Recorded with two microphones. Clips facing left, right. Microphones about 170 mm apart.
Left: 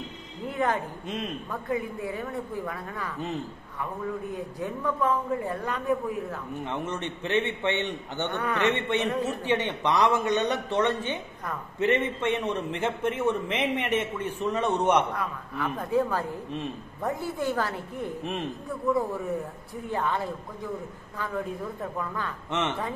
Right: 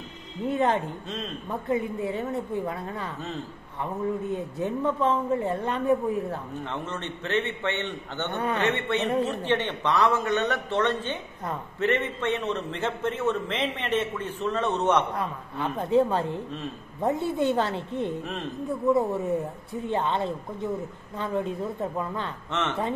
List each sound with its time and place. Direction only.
0.5 s speech: 25° right (ahead or behind)
1.0 s a man's voice: 15° left (ahead or behind)
1.5 s speech: 25° right (ahead or behind)
6.6 s a man's voice: 15° left (ahead or behind)
8.4 s speech: 25° right (ahead or behind)
8.7 s a man's voice: 15° left (ahead or behind)
15.1 s speech: 25° right (ahead or behind)
16.4 s a man's voice: 15° left (ahead or behind)
17.0 s speech: 25° right (ahead or behind)
18.2 s a man's voice: 15° left (ahead or behind)
18.7 s speech: 25° right (ahead or behind)
22.5 s a man's voice: 15° left (ahead or behind)